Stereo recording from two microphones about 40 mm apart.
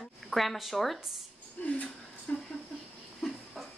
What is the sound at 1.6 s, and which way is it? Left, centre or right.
Speech, left.